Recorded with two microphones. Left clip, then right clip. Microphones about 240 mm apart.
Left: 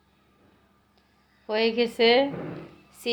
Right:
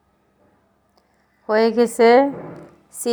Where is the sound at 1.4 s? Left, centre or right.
Right.